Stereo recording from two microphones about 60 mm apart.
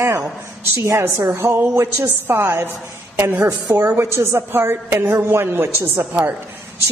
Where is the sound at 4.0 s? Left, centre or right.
Right.